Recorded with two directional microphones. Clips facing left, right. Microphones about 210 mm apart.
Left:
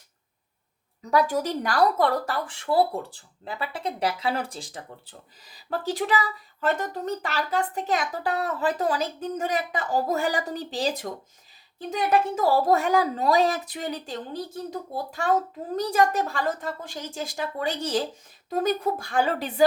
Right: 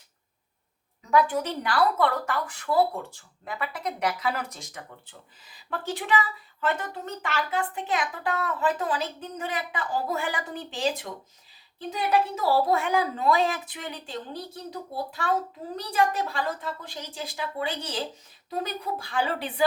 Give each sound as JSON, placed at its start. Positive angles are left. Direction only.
{"t": 1.1, "sound": "a woman's voice", "side_deg": 40}